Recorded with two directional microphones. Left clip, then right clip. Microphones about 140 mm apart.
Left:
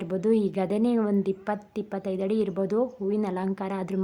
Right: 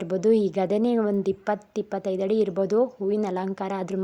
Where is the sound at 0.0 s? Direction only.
35° right (ahead or behind).